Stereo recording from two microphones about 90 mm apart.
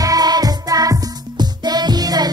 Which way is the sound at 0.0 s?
45° right (ahead or behind).